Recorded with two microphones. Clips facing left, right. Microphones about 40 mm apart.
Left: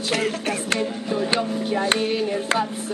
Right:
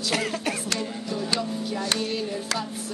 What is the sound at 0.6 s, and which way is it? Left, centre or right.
Music, left.